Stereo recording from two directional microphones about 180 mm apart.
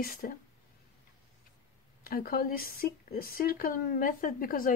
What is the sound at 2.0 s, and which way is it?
Speech, 55° left (ahead or behind).